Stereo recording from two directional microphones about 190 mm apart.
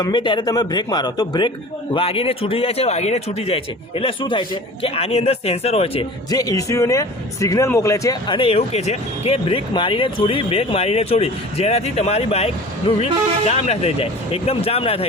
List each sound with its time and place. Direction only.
0.0 s a man's voice: 25° left (ahead or behind)
8.4 s speech: 30° left (ahead or behind)